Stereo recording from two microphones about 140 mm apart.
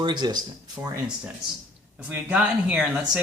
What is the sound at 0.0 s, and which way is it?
Speech, 35° right (ahead or behind).